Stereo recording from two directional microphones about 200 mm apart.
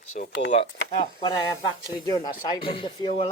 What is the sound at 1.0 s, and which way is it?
Speech, 20° left (ahead or behind).